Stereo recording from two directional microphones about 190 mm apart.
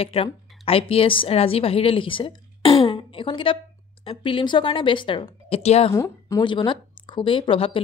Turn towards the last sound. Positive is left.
turn(degrees=30)  # may be behind; listen again after turning